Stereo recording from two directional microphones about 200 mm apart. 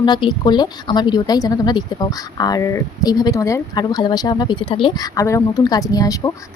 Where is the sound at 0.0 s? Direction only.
20° left (ahead or behind).